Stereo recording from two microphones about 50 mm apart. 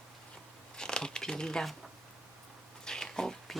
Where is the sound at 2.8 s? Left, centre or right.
Centre.